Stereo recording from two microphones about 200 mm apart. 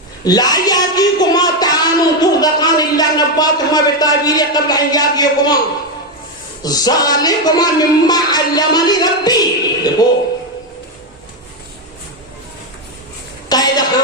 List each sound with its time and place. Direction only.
0.3 s speech: 20° left (ahead or behind)
6.6 s speech: 20° left (ahead or behind)
13.5 s a sound: 20° left (ahead or behind)